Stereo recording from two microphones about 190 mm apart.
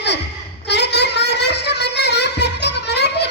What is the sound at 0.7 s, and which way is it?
Music, 60° left (ahead or behind).